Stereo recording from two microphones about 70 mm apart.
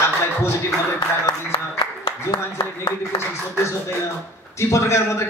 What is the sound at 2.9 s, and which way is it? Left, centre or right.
A man's voice, left.